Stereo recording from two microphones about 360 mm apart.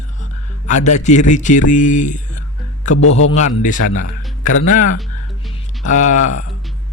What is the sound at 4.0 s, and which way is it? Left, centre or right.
Music, left.